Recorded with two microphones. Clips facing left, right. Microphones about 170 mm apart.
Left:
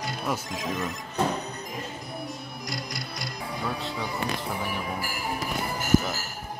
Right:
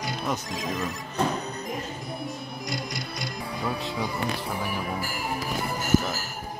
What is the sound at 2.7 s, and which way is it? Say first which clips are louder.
Music: right 2 dB; centre (ahead or behind).